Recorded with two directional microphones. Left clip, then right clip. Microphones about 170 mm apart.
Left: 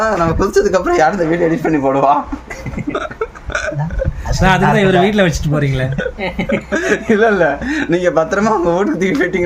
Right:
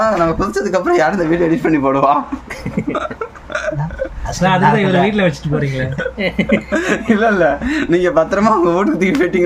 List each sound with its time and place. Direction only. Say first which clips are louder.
0.0 s speech: even; 10° left (ahead or behind)
2.9 s hiccup: left 2 dB; 5° left (ahead or behind)
4.4 s a man's voice: left 1 dB; 90° left
6.1 s speech: right 2 dB; 40° right (ahead or behind)
6.5 s speech: left 3 dB; centre (ahead or behind)